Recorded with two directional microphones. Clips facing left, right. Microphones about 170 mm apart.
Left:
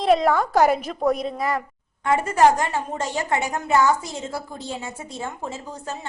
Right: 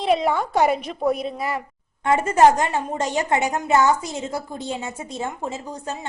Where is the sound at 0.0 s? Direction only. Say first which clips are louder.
Left 2 dB; centre (ahead or behind).